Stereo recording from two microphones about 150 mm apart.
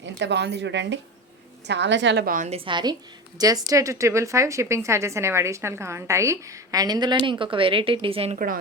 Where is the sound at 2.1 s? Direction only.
70° right (ahead or behind).